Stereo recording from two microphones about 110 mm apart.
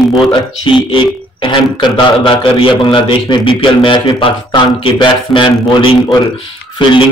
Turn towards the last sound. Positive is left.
turn(degrees=45)  # may be behind; listen again after turning